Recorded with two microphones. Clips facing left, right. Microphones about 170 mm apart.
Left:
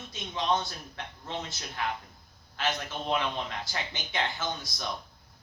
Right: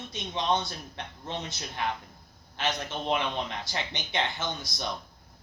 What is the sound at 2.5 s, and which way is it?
Speech, 20° right (ahead or behind).